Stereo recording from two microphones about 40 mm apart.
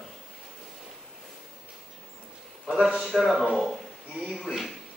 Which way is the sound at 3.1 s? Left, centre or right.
Centre.